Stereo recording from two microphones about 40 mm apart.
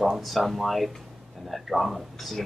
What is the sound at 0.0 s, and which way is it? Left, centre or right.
Speech, centre.